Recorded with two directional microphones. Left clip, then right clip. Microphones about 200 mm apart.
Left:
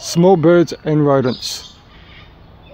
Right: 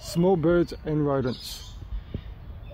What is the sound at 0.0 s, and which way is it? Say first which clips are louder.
Speech: left 11 dB; 20° left (ahead or behind).